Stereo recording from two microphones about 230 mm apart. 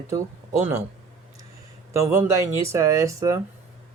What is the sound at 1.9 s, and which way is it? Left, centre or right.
Speech, centre.